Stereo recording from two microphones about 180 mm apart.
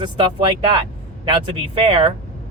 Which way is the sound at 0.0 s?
25° right (ahead or behind).